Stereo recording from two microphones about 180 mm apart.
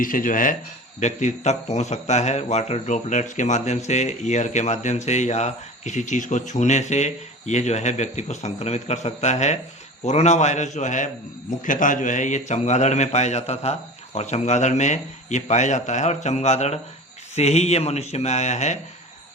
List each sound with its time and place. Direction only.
0.0 s speech: 50° left (ahead or behind)